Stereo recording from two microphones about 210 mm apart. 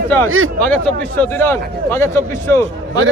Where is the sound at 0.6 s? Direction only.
5° left (ahead or behind).